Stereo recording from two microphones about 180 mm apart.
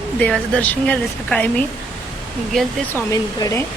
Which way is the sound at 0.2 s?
5° left (ahead or behind).